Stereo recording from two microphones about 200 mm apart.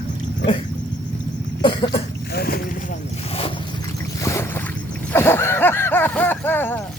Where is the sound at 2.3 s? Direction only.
50° left (ahead or behind).